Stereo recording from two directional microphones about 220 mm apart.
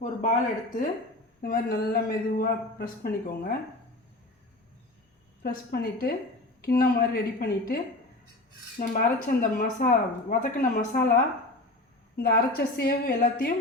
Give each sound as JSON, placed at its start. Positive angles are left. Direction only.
{"t": 0.0, "sound": "a man's voice", "side_deg": 35}
{"t": 5.4, "sound": "a man's voice", "side_deg": 45}
{"t": 8.8, "sound": "a woman's voice", "side_deg": 40}
{"t": 12.1, "sound": "a man's voice", "side_deg": 45}